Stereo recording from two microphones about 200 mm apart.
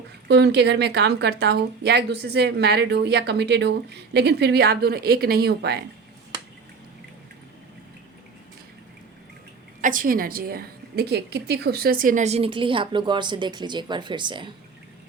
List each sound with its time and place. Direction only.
0.3 s speech: 60° right (ahead or behind)
9.8 s a woman's voice: 45° right (ahead or behind); by 14.5 s 25° right (ahead or behind)